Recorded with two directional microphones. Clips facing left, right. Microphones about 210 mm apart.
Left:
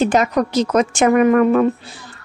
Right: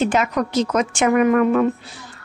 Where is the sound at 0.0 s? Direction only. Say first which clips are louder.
Left 3 dB; 35° left (ahead or behind).